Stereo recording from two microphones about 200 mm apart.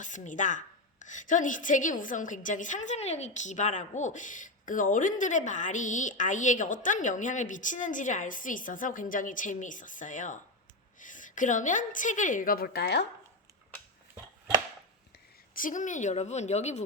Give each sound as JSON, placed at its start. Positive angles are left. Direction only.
{"t": 0.0, "sound": "a woman's voice", "side_deg": 40}
{"t": 15.5, "sound": "a woman's voice", "side_deg": 40}